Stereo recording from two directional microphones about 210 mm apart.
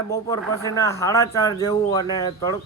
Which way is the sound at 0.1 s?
15° left (ahead or behind).